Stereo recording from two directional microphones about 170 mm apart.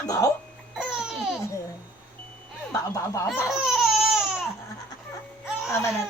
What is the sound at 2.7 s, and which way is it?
Speech, 20° left (ahead or behind).